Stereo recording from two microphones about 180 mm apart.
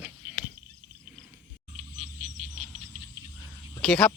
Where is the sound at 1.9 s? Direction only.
45° right (ahead or behind).